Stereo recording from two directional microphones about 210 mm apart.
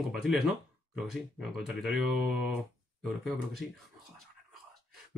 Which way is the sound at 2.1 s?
45° right (ahead or behind).